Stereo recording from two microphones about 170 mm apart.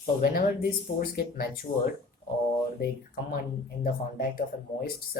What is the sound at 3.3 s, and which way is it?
Speech, 65° left (ahead or behind).